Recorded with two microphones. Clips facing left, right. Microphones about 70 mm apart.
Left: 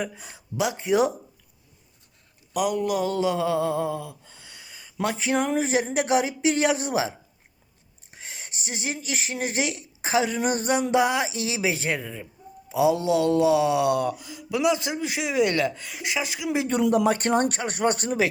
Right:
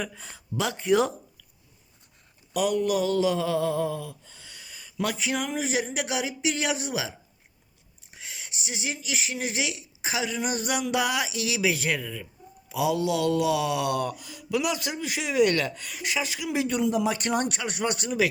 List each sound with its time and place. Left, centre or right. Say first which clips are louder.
0.0 s speech: left 3 dB; centre
2.5 s speech: even; centre; by 7.1 s left
8.1 s speech: left 1 dB; left
16.8 s speech: left 4 dB; left